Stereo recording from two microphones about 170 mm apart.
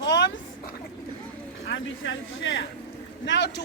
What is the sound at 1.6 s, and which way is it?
Speech, 90° left.